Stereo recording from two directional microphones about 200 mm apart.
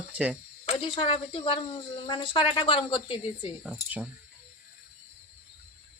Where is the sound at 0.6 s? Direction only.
25° left (ahead or behind).